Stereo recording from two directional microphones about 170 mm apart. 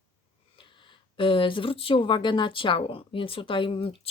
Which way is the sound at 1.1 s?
30° left (ahead or behind).